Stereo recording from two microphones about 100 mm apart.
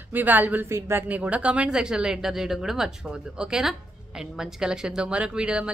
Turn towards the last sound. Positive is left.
turn(degrees=-10)  # may be behind; listen again after turning